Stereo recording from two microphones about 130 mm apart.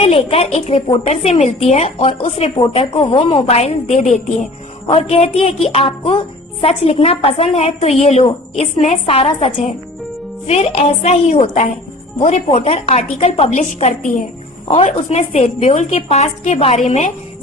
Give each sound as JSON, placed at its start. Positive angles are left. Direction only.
{"t": 0.0, "sound": "a woman's voice", "side_deg": 50}
{"t": 4.9, "sound": "a woman's voice", "side_deg": 50}
{"t": 12.2, "sound": "a woman's voice", "side_deg": 50}